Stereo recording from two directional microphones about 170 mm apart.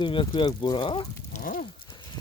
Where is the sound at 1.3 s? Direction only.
55° left (ahead or behind).